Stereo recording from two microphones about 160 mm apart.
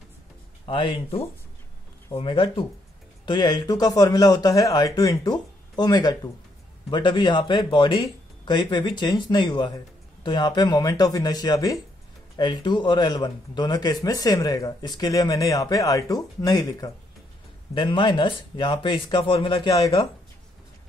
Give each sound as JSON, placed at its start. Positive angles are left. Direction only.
{"t": 0.7, "sound": "speech", "side_deg": 35}